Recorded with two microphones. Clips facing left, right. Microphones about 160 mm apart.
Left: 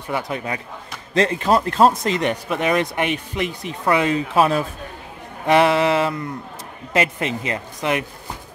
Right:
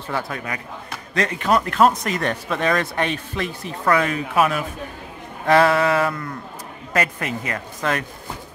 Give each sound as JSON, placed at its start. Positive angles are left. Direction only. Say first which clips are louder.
{"t": 0.1, "sound": "speech", "louder": "left 2 dB", "side_deg": 20}